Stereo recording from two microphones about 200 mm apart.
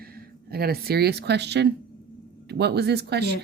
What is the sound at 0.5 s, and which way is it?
Speech, 50° right (ahead or behind).